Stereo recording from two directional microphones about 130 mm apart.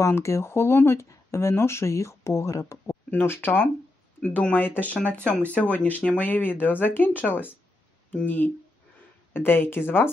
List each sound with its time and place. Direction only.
0.0 s speech: 20° left (ahead or behind)